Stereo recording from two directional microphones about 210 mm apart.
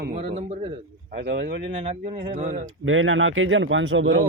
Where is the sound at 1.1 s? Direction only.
55° right (ahead or behind); by 2.6 s 35° right (ahead or behind).